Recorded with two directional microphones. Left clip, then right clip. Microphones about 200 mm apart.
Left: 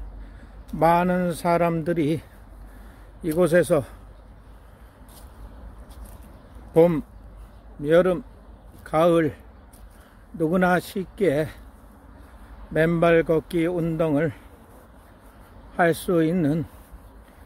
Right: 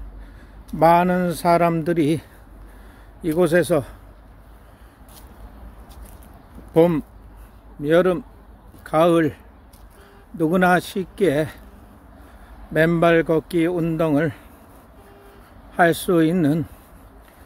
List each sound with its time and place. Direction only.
0.7 s speech: 15° right (ahead or behind)
6.7 s speech: 10° right (ahead or behind)
12.7 s speech: 15° right (ahead or behind)
15.7 s speech: 15° right (ahead or behind)